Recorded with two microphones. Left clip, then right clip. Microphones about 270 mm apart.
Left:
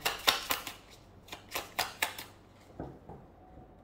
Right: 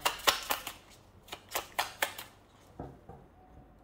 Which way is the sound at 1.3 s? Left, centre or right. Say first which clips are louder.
Right 2 dB; centre.